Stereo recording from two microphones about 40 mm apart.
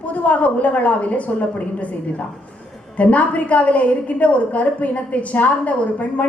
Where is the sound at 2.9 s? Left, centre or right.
Left.